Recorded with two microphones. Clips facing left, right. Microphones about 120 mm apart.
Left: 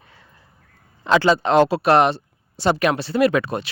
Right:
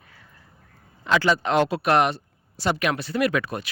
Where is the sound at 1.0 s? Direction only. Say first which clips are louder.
Left 5 dB; 30° left (ahead or behind).